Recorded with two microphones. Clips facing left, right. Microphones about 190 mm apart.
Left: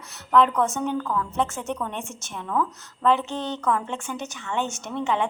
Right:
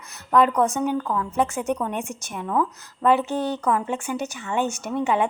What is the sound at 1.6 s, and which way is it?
A woman's voice, 15° right (ahead or behind).